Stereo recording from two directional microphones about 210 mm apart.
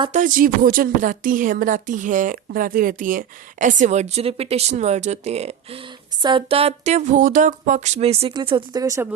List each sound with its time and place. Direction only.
0.1 s speech: 40° right (ahead or behind); by 9.0 s 15° right (ahead or behind)